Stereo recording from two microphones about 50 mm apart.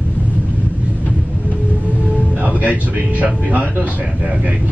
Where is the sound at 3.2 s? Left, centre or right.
Right.